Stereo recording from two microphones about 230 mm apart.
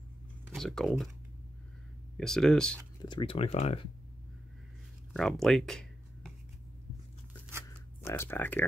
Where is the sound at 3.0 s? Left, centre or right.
Left.